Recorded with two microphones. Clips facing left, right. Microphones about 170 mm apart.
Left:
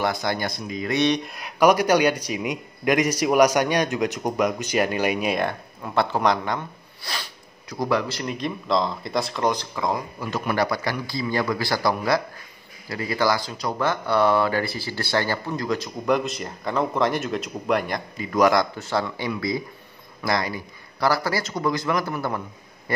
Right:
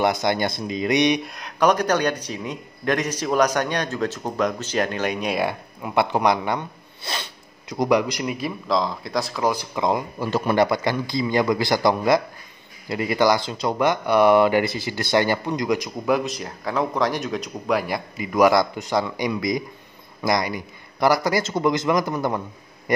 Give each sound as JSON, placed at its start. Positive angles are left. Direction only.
{"t": 0.0, "sound": "a man's voice", "side_deg": -20}
{"t": 1.2, "sound": "speech", "side_deg": 5}
{"t": 5.4, "sound": "a man's voice", "side_deg": -10}
{"t": 9.8, "sound": "a man's voice", "side_deg": -25}
{"t": 16.2, "sound": "a man's voice", "side_deg": 0}